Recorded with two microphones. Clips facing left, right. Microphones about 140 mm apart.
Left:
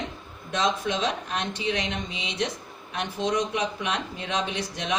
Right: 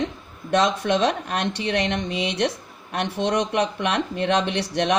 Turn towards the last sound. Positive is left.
turn(degrees=-70)  # may be behind; listen again after turning